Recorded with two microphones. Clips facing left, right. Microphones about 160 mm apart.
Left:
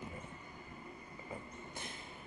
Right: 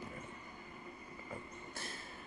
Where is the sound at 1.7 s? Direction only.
20° left (ahead or behind).